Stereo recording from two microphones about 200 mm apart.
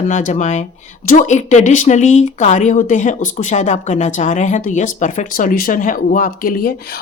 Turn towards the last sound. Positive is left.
turn(degrees=45)  # may be behind; listen again after turning